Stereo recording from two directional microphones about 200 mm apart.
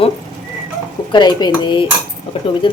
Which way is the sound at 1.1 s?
20° left (ahead or behind).